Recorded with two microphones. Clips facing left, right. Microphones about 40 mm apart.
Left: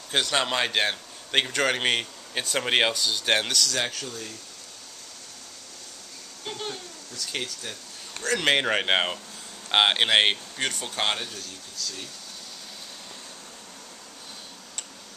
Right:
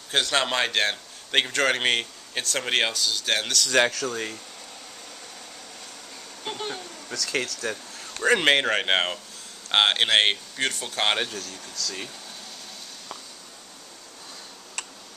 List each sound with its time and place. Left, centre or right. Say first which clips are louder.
0.1 s a man's voice: right 1 dB; centre
2.4 s speech: left 2 dB; centre
3.7 s speech: right 8 dB; right
6.4 s speech: right 2 dB; right
7.1 s speech: right 6 dB; right
8.2 s speech: right 6 dB; right
8.5 s speech: right 1 dB; centre